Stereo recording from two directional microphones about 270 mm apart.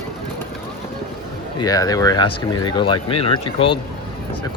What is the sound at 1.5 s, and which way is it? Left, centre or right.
Speech, centre.